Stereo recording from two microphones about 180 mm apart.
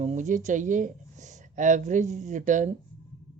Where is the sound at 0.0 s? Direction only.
40° right (ahead or behind).